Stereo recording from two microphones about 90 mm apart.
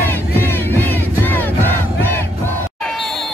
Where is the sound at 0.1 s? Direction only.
25° left (ahead or behind).